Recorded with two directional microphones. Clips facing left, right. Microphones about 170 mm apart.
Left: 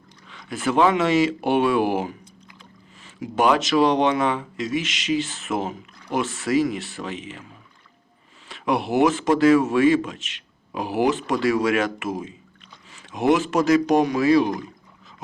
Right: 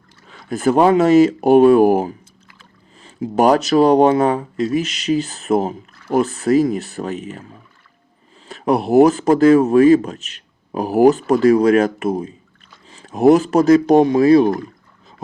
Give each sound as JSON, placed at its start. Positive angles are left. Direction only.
{"t": 0.3, "sound": "speech", "side_deg": -40}
{"t": 8.4, "sound": "a sound", "side_deg": -35}
{"t": 8.9, "sound": "speech", "side_deg": -35}